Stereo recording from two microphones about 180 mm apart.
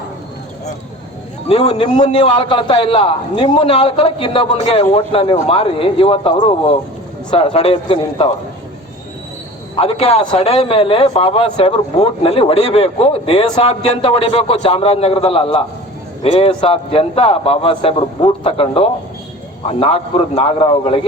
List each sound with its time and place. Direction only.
1.5 s a man's voice: 35° left (ahead or behind)
9.7 s a man's voice: 35° left (ahead or behind)